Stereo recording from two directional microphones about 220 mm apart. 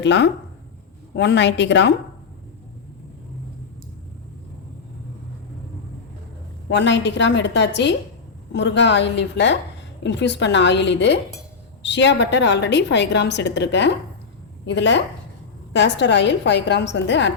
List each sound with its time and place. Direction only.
0.0 s a woman's voice: 55° left (ahead or behind)
6.7 s a woman's voice: 50° left (ahead or behind)